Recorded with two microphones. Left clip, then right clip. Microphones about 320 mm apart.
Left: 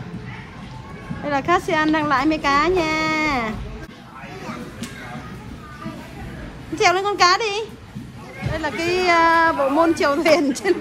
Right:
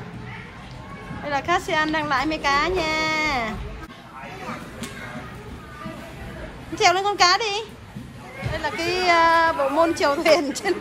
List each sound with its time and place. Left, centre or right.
1.2 s a woman's voice: centre
6.8 s a woman's voice: centre